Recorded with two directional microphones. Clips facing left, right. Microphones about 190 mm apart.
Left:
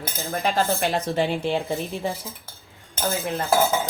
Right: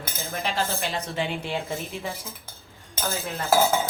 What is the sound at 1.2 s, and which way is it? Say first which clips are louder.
Speech: left 4 dB; 35° left (ahead or behind).